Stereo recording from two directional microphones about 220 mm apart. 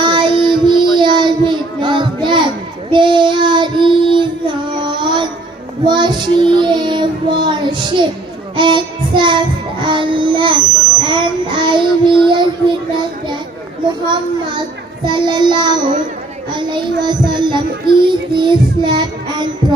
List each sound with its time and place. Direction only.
0.0 s child singing: 20° right (ahead or behind)
15.0 s child singing: 20° right (ahead or behind)